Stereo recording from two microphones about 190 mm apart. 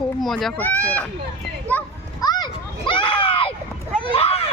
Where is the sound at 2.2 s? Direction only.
20° left (ahead or behind).